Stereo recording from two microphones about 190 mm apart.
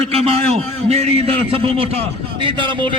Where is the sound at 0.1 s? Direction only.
30° right (ahead or behind).